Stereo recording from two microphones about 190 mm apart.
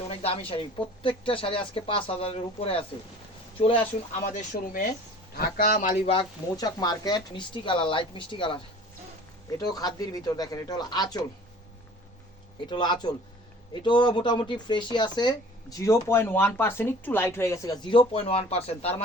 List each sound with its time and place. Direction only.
0.1 s speech: 30° left (ahead or behind)
4.3 s a man's voice: 45° left (ahead or behind)
6.1 s speech: 25° left (ahead or behind)
9.6 s speech: 20° left (ahead or behind)
12.6 s speech: 25° left (ahead or behind)
17.9 s speech: 30° left (ahead or behind)